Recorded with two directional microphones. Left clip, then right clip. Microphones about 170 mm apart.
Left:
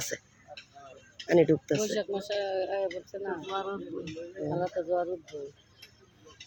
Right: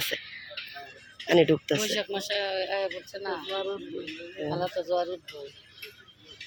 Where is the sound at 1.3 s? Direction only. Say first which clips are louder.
Right 2 dB; 10° left (ahead or behind).